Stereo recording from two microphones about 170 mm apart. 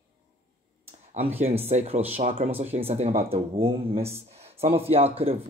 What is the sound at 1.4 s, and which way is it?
Speech, 40° right (ahead or behind).